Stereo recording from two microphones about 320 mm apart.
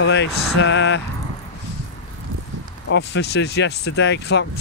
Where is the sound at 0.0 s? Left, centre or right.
Left.